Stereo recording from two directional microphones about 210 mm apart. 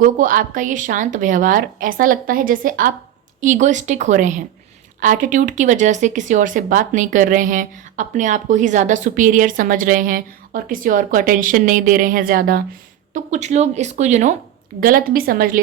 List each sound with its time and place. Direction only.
0.0 s speech: 40° right (ahead or behind)
13.1 s a woman's voice: 35° right (ahead or behind)